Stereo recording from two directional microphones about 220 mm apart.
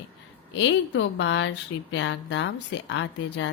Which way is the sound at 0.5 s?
55° left (ahead or behind).